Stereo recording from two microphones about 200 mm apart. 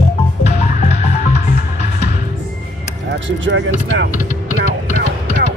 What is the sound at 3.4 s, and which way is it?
Speech, 65° right (ahead or behind).